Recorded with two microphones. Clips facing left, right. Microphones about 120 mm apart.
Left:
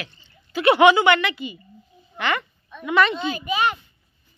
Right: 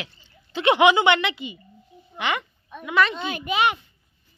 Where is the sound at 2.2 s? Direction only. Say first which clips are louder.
Left 2 dB; 15° right (ahead or behind).